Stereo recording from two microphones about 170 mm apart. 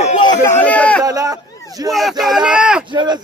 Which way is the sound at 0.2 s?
20° left (ahead or behind).